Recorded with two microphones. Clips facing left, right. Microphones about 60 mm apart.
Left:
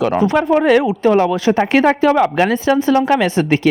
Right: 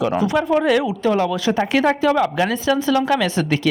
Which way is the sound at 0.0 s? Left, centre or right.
Left.